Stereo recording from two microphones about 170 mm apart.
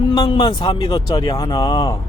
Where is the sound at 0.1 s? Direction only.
25° left (ahead or behind).